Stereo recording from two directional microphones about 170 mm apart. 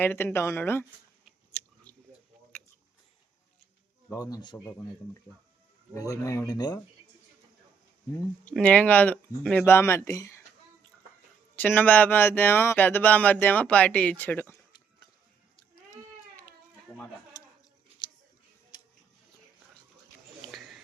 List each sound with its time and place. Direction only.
0.0 s speech: 10° left (ahead or behind)
4.1 s speech: 20° left (ahead or behind)
5.9 s speech: 20° left (ahead or behind)
8.4 s speech: 10° left (ahead or behind)
11.5 s speech: 10° left (ahead or behind)
16.9 s a sound: 5° left (ahead or behind)
18.7 s music: 25° left (ahead or behind)